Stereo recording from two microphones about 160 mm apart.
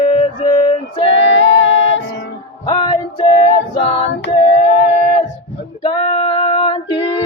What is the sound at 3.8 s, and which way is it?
Female singing, 40° left (ahead or behind).